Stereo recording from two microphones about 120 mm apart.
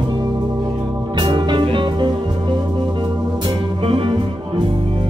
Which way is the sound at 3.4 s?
45° right (ahead or behind).